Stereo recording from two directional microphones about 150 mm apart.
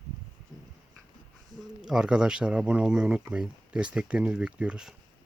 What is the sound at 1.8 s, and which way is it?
Speech, 5° right (ahead or behind).